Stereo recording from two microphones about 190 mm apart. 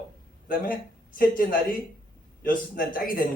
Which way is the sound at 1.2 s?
50° left (ahead or behind).